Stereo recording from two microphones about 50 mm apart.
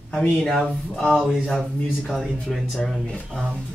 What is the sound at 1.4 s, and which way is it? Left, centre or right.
Speech, left.